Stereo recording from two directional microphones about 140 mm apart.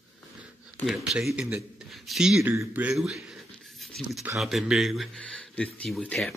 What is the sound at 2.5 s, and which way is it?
Speech, 15° right (ahead or behind).